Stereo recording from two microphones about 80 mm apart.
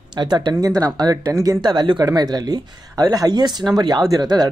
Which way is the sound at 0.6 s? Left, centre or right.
Right.